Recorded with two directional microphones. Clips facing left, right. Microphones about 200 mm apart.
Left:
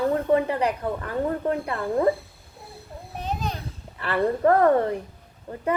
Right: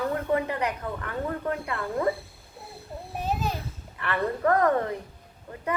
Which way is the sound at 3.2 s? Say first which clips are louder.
Right 1 dB; 5° right (ahead or behind).